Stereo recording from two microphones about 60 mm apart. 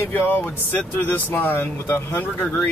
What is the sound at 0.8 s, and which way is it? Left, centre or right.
Speech, left.